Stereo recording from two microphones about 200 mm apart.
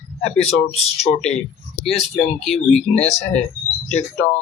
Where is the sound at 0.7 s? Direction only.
30° left (ahead or behind).